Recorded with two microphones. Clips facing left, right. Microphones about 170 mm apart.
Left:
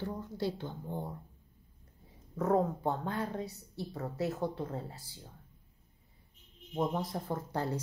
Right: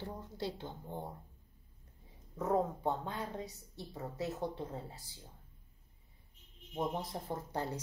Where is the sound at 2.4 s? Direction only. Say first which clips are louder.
Left 4 dB; 50° left (ahead or behind).